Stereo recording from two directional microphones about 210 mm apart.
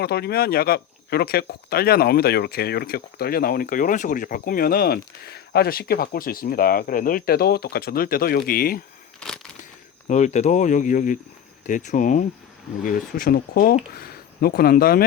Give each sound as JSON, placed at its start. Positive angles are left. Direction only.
{"t": 0.0, "sound": "speech", "side_deg": 50}
{"t": 9.2, "sound": "a sound", "side_deg": 0}
{"t": 10.1, "sound": "speech", "side_deg": 35}